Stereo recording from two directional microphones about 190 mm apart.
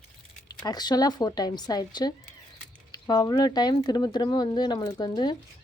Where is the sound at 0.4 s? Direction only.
20° left (ahead or behind).